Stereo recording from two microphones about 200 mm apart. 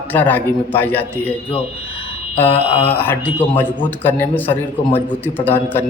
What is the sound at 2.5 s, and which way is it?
Speech, 30° left (ahead or behind).